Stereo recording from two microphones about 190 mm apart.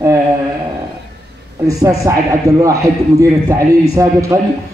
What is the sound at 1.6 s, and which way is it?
Speech, 15° right (ahead or behind).